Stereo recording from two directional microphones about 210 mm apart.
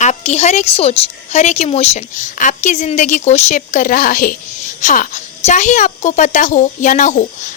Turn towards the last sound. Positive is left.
turn(degrees=35)  # may be behind; listen again after turning